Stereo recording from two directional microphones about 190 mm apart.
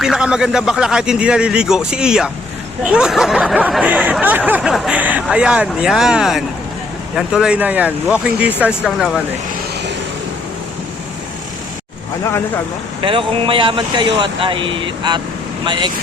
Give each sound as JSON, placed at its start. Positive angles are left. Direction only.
{"t": 0.0, "sound": "speech", "side_deg": -5}
{"t": 13.0, "sound": "speech", "side_deg": -25}